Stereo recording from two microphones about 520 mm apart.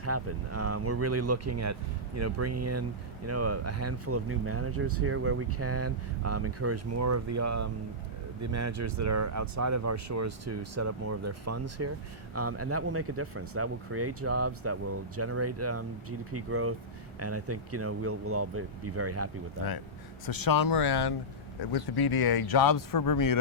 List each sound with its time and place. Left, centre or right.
0.0 s speech: right
20.2 s speech: left